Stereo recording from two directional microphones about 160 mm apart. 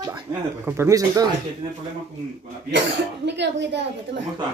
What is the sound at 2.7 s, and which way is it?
Speech, 90° right.